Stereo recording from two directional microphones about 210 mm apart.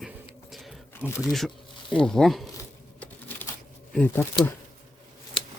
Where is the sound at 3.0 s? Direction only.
10° left (ahead or behind).